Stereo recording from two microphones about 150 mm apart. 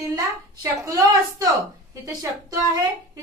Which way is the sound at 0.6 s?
20° right (ahead or behind).